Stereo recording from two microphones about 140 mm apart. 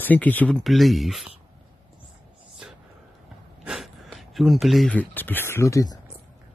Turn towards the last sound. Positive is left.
turn(degrees=25)  # may be behind; listen again after turning